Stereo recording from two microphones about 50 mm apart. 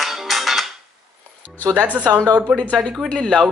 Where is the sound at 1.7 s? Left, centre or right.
Right.